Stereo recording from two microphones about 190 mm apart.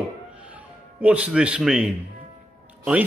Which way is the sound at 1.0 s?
5° right (ahead or behind).